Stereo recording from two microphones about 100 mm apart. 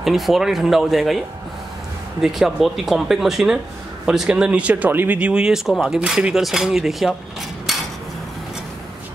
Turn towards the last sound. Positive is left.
turn(degrees=0)  # may be behind; listen again after turning